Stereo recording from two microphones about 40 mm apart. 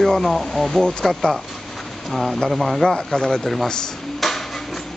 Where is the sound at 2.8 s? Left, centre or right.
Centre.